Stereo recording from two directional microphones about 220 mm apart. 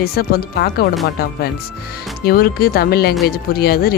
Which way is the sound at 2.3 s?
45° left (ahead or behind).